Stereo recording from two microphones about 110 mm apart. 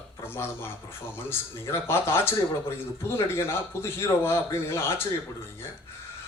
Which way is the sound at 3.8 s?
20° left (ahead or behind).